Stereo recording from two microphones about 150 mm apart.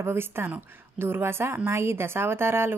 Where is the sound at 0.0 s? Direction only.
15° right (ahead or behind).